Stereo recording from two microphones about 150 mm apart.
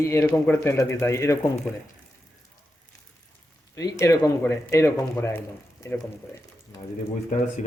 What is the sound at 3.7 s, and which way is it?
Speech, 20° left (ahead or behind).